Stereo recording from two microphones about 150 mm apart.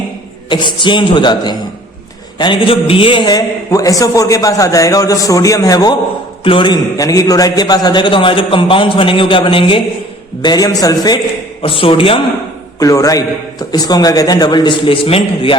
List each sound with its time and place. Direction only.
0.4 s a man's voice: 30° left (ahead or behind)
11.6 s a man's voice: 35° left (ahead or behind)
12.8 s a man's voice: 25° left (ahead or behind)